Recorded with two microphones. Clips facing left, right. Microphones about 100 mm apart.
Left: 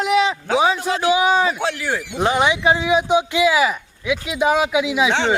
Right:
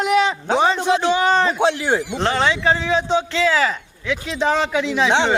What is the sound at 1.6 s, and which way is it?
Speech, 25° right (ahead or behind).